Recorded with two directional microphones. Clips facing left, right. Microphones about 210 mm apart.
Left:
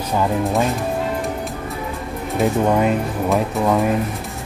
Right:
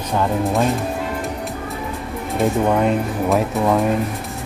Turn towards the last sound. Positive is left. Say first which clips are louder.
# right 1 dB
turn(degrees=0)  # may be behind; listen again after turning